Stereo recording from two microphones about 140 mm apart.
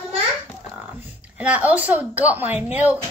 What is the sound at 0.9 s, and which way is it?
A woman's voice, 10° right (ahead or behind).